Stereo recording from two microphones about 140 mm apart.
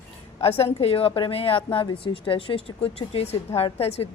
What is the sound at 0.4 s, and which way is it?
Speech, 45° left (ahead or behind).